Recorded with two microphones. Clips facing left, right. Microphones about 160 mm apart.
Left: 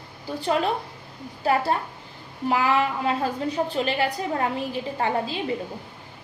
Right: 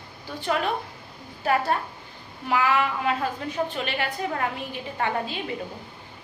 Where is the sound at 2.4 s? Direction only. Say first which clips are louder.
Left 1 dB; 30° left (ahead or behind).